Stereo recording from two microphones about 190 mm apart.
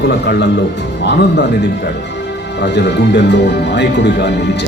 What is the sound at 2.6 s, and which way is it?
Speech, 65° left (ahead or behind).